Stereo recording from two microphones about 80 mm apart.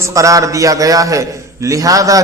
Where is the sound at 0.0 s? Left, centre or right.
Right.